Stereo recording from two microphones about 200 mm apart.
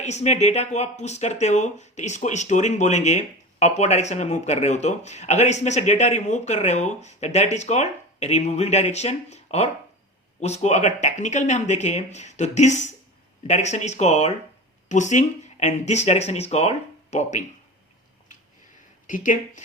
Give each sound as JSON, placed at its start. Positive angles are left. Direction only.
{"t": 0.0, "sound": "speech", "side_deg": 35}
{"t": 19.0, "sound": "speech", "side_deg": 40}